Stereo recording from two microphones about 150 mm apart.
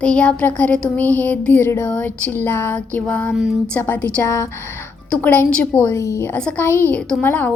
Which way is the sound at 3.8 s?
15° left (ahead or behind).